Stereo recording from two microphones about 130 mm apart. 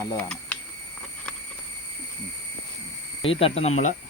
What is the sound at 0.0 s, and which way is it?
Speech, 20° left (ahead or behind).